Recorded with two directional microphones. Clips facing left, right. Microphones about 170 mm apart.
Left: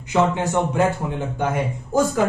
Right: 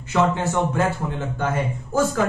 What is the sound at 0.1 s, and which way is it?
A man's voice, 15° left (ahead or behind).